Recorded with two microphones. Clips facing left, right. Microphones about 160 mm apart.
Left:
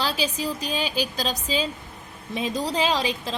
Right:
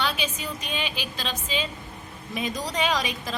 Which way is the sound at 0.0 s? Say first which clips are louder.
Left 3 dB; 35° left (ahead or behind).